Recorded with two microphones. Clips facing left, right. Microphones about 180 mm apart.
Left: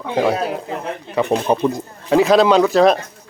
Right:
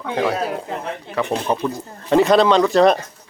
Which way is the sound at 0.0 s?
20° left (ahead or behind).